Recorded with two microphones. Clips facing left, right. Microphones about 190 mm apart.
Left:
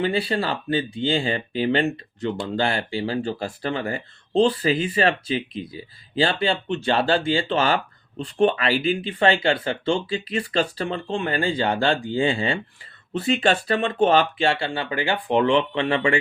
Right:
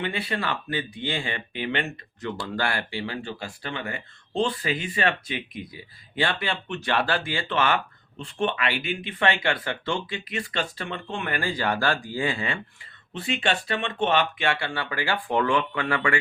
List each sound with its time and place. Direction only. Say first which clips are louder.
0.0 s speech: left 6 dB; 30° left (ahead or behind)
13.1 s speech: left 6 dB; 40° left (ahead or behind); by 16.1 s 25° left (ahead or behind)